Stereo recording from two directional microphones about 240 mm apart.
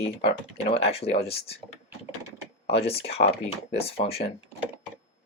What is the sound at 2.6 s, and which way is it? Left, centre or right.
Speech, left.